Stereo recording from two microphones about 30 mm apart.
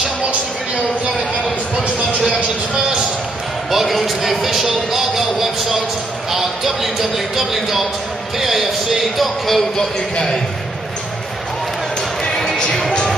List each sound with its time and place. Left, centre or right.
3.7 s speech: centre
12.3 s music: left